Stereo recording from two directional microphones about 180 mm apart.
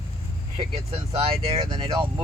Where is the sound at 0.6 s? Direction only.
30° right (ahead or behind).